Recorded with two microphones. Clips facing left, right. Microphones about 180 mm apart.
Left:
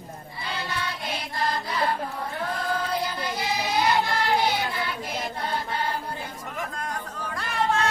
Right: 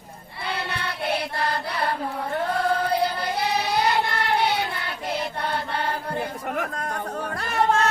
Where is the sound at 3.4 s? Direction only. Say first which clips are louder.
Right 2 dB; 65° right (ahead or behind).